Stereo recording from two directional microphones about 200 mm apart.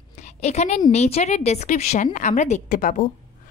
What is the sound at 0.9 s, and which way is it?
A woman's voice, 35° left (ahead or behind).